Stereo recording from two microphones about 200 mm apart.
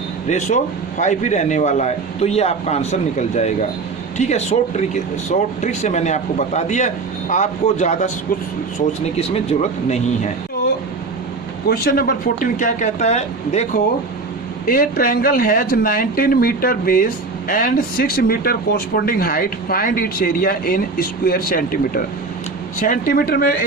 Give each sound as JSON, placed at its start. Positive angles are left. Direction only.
{"t": 0.3, "sound": "a man's voice", "side_deg": 35}
{"t": 11.7, "sound": "a man's voice", "side_deg": 45}
{"t": 14.7, "sound": "speech", "side_deg": 45}